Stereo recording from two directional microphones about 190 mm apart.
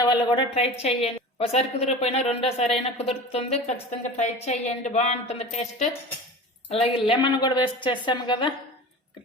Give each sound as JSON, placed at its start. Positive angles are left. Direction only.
{"t": 0.0, "sound": "a woman's voice", "side_deg": 25}